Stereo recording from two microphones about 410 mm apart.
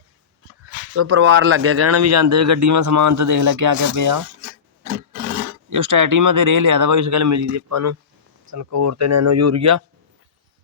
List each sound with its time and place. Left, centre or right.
0.9 s speech: right
5.7 s speech: right